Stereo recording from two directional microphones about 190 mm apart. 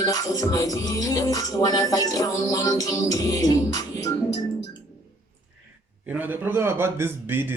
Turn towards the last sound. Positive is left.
turn(degrees=-10)  # may be behind; listen again after turning